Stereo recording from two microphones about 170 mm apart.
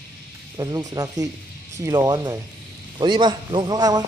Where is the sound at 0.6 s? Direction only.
20° right (ahead or behind).